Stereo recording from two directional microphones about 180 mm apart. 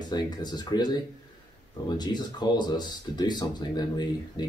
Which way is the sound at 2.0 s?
25° left (ahead or behind).